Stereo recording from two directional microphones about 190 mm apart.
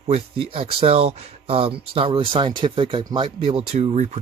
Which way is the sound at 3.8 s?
35° right (ahead or behind).